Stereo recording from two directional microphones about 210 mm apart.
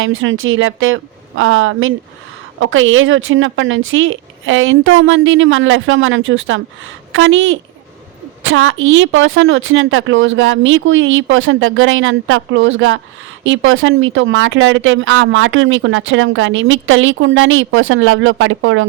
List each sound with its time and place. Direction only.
0.0 s speech: 70° right (ahead or behind)